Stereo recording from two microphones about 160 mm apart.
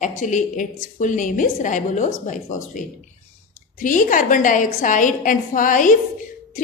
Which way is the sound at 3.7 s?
55° left (ahead or behind).